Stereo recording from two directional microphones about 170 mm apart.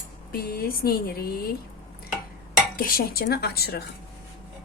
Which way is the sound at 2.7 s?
60° left (ahead or behind).